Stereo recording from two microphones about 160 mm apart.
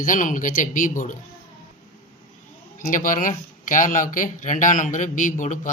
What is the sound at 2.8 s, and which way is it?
Speech, 55° left (ahead or behind).